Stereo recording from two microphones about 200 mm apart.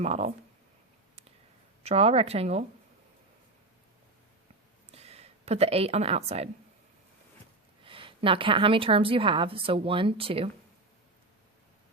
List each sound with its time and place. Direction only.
0.0 s a woman's voice: 30° right (ahead or behind)
1.8 s a woman's voice: 30° right (ahead or behind)
4.9 s a woman's voice: 30° right (ahead or behind)
7.9 s a woman's voice: 25° right (ahead or behind)